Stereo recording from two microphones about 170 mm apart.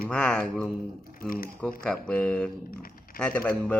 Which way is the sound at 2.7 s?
60° left (ahead or behind).